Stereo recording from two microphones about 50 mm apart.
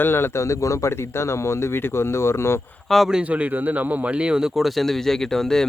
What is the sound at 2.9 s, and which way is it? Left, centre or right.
Speech, centre.